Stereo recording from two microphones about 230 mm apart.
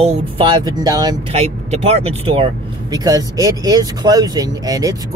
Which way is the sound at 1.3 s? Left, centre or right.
Right.